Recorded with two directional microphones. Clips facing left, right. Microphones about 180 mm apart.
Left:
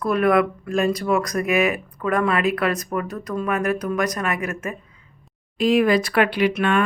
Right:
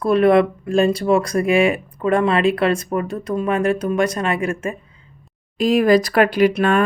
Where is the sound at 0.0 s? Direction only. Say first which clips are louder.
Right 4 dB; 30° right (ahead or behind).